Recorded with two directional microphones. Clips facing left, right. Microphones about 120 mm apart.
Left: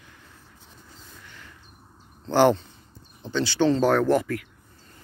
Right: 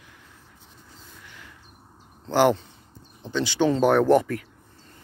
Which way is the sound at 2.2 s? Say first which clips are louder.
Left 1 dB; 10° right (ahead or behind).